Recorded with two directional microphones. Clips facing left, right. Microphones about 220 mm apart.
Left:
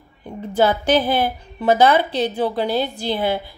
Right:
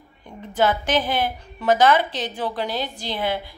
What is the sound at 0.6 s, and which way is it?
Speech, 35° left (ahead or behind).